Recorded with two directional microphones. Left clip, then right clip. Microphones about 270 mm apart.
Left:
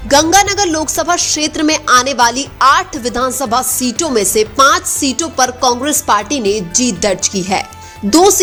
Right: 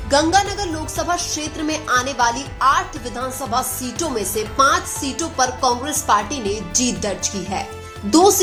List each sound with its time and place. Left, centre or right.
0.1 s a woman's voice: left